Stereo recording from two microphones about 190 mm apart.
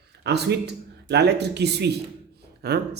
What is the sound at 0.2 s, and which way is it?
Speech, 60° right (ahead or behind).